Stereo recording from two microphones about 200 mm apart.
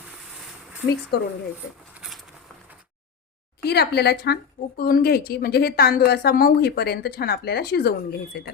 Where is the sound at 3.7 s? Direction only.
55° left (ahead or behind).